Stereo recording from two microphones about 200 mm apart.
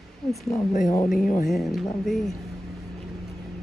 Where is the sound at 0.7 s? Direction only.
40° left (ahead or behind).